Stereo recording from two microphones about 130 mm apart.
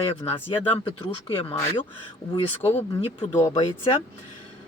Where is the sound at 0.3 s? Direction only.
45° left (ahead or behind).